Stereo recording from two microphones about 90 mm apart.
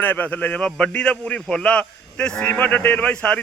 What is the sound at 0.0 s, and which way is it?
A man's voice, 20° left (ahead or behind).